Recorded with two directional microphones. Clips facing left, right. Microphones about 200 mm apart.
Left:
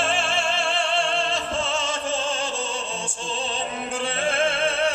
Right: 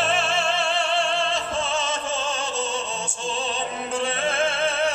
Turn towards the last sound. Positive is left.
turn(degrees=30)  # may be behind; listen again after turning